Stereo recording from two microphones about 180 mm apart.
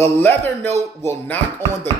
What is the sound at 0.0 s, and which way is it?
A man's voice, 10° left (ahead or behind).